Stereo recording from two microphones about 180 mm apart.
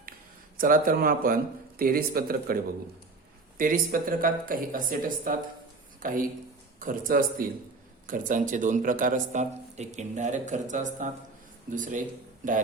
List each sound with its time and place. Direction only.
0.5 s speech: 50° right (ahead or behind)
3.6 s speech: 50° right (ahead or behind)